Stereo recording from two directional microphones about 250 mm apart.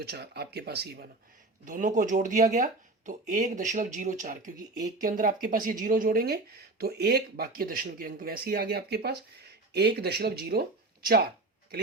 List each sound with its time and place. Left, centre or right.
0.0 s speech: right